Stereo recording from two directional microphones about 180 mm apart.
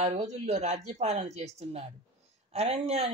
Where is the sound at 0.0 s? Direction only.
40° right (ahead or behind).